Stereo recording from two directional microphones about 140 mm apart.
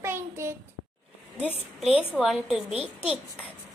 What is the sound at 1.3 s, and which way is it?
A woman's voice, 5° right (ahead or behind).